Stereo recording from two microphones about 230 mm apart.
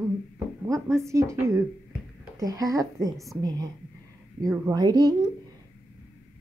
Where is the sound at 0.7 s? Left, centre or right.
Centre.